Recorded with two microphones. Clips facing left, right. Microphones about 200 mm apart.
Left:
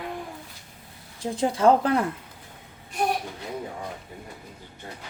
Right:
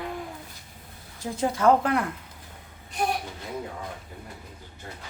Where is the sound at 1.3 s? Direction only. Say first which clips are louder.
Left 1 dB; 30° left (ahead or behind).